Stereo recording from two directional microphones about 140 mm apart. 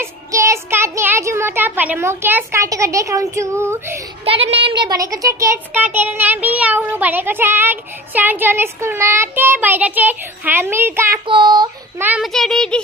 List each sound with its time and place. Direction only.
0.0 s a child's voice: 20° right (ahead or behind)
4.2 s speech: 45° right (ahead or behind); by 11.1 s 15° right (ahead or behind)
11.2 s child singing: 35° right (ahead or behind)
12.2 s a child's voice: centre (ahead or behind)